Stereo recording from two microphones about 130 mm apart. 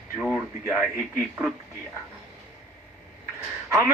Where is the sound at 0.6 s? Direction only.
20° right (ahead or behind).